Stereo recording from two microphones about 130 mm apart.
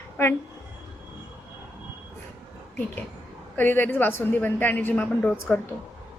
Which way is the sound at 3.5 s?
15° left (ahead or behind).